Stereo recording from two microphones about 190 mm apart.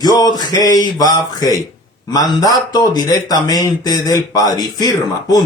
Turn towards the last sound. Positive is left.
turn(degrees=20)  # may be behind; listen again after turning